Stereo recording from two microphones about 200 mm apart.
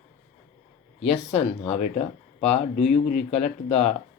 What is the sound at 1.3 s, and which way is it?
Speech, 30° left (ahead or behind).